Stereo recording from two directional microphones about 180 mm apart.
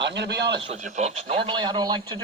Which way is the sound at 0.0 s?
70° right (ahead or behind).